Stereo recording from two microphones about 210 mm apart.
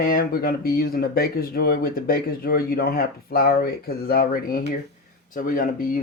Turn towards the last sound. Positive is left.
turn(degrees=40)  # may be behind; listen again after turning